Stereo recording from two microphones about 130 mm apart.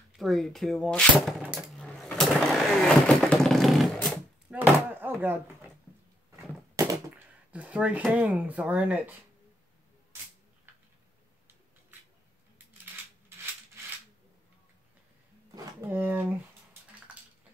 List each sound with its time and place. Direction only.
0.2 s speech: 5° left (ahead or behind)
1.8 s vehicle: 5° left (ahead or behind)
4.5 s chopping: 15° right (ahead or behind)
6.8 s a sound: 25° right (ahead or behind)
7.5 s a sound: 10° right (ahead or behind)
8.1 s speech: 10° right (ahead or behind)
15.9 s speech: 15° right (ahead or behind)